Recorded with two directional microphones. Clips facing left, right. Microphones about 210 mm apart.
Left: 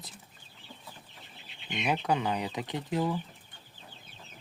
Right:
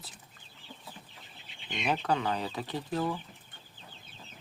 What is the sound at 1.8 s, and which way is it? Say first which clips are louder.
Speech: left 1 dB; 10° left (ahead or behind).